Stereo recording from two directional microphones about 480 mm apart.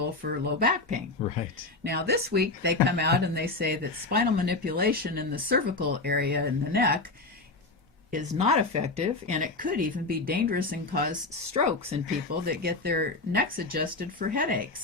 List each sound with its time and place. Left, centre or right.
0.0 s speech: centre
1.2 s speech: centre
1.8 s speech: centre
8.1 s speech: centre
12.6 s speech: centre